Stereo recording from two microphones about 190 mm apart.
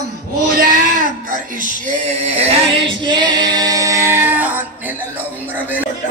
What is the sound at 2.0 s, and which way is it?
Female singing, 30° right (ahead or behind).